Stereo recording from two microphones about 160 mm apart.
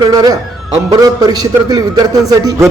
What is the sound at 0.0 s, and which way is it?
A man's voice, 25° right (ahead or behind).